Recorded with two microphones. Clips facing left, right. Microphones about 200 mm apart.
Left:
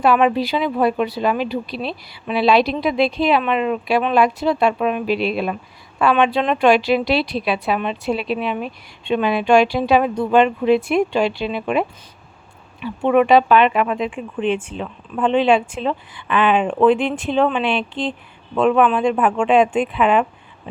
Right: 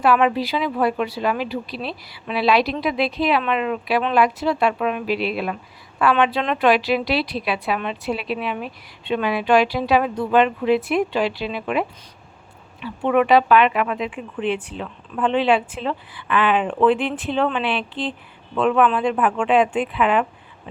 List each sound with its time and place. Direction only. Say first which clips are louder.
0.0 s a woman's voice: left 2 dB; 25° left (ahead or behind)
14.4 s speech: left 3 dB; 15° right (ahead or behind)
14.8 s speech: left 2 dB; 20° left (ahead or behind)
19.1 s a woman's voice: left 3 dB; 25° left (ahead or behind)